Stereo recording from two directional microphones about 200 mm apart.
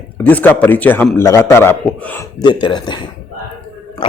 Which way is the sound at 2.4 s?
25° left (ahead or behind).